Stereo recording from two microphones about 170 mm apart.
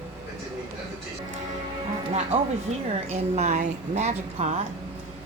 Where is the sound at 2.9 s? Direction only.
40° right (ahead or behind).